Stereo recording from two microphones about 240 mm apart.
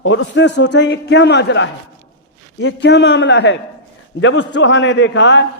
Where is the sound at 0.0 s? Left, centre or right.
Left.